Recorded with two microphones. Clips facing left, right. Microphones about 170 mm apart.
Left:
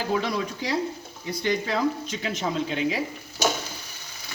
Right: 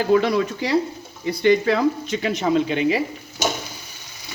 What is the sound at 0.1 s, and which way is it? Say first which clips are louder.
Speech: right 9 dB; 65° right (ahead or behind).